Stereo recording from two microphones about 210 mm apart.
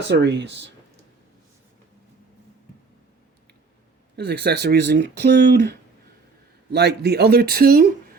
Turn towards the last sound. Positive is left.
turn(degrees=-45)  # may be behind; listen again after turning